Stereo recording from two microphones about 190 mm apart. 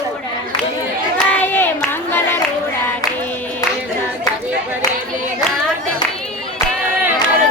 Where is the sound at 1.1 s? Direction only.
10° left (ahead or behind).